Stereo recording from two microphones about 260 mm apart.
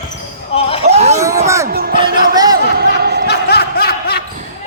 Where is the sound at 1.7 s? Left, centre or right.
Right.